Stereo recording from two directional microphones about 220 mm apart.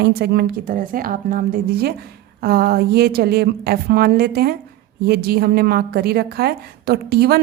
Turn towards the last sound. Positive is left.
turn(degrees=-45)  # may be behind; listen again after turning